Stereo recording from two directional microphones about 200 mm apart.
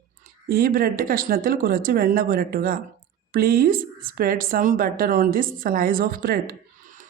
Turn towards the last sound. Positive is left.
turn(degrees=-45)  # may be behind; listen again after turning